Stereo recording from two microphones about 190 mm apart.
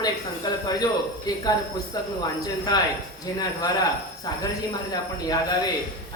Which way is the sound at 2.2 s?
20° left (ahead or behind).